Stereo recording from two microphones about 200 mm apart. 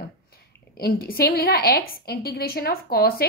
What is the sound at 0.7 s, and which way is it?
A woman's voice, 50° left (ahead or behind).